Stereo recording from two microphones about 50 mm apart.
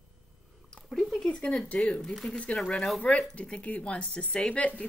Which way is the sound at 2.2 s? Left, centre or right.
Left.